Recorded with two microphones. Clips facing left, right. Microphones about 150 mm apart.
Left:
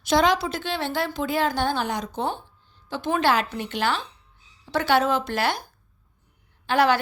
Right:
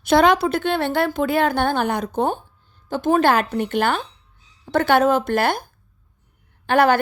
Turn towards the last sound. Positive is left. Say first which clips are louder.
# right 4 dB
turn(degrees=-50)  # may be behind; listen again after turning